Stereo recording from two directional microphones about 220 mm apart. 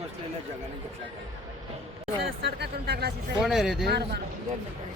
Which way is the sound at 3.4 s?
Centre (ahead or behind).